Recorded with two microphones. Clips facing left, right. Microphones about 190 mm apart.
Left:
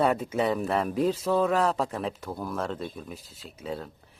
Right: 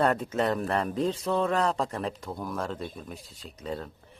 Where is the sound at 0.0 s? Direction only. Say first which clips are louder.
Left 1 dB; 5° left (ahead or behind).